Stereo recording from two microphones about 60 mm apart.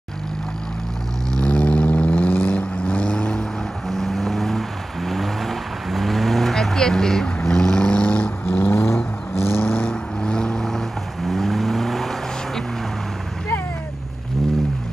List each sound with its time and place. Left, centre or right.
1.4 s vehicle: centre
2.8 s vehicle: centre
3.9 s vehicle: centre; by 8.7 s left
8.7 s vehicle: left
9.8 s vehicle: centre
11.2 s vehicle: centre